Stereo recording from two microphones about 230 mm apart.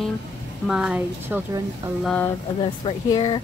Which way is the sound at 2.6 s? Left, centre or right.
Left.